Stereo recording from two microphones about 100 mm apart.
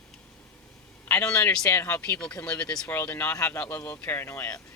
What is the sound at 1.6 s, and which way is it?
Speech, 25° left (ahead or behind).